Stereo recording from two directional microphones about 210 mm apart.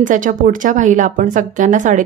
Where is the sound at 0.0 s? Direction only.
40° right (ahead or behind).